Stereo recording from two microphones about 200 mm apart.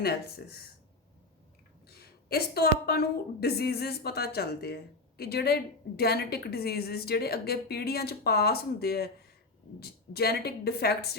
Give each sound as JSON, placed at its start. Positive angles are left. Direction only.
{"t": 0.0, "sound": "a woman's voice", "side_deg": 50}
{"t": 1.9, "sound": "a woman's voice", "side_deg": 50}